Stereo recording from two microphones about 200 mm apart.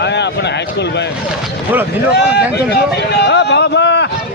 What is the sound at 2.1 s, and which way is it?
Speech, 55° left (ahead or behind).